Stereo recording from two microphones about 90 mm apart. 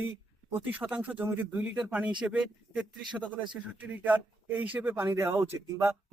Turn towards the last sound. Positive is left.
turn(degrees=-25)  # may be behind; listen again after turning